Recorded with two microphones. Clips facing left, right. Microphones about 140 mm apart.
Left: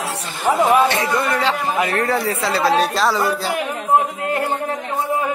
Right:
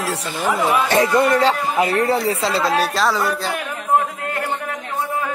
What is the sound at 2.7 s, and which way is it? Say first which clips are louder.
Speech: left 1 dB; centre (ahead or behind).